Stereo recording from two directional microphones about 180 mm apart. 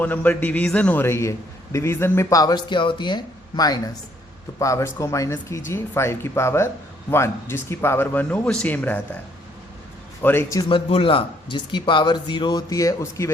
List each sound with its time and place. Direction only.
0.0 s a man's voice: 10° left (ahead or behind)
10.2 s speech: 15° left (ahead or behind)